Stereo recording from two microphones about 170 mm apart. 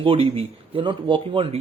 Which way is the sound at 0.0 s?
30° right (ahead or behind).